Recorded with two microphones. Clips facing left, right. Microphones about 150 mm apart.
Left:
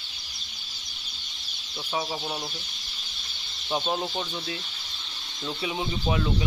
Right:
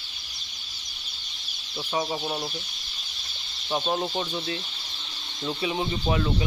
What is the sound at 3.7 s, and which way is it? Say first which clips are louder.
Speech: right 1 dB; centre (ahead or behind).